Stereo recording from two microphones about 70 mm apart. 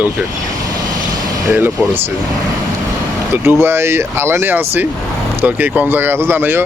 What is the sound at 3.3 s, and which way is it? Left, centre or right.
Speech, right.